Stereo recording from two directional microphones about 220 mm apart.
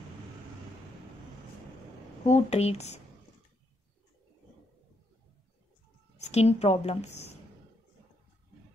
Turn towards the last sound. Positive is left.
turn(degrees=30)  # may be behind; listen again after turning